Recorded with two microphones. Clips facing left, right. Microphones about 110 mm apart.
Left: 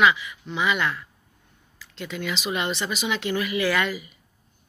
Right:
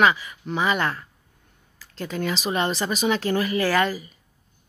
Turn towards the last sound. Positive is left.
turn(degrees=-35)  # may be behind; listen again after turning